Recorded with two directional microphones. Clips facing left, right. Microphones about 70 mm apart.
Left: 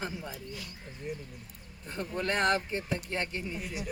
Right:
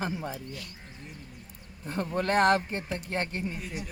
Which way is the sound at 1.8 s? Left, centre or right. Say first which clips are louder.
Right 4 dB; right.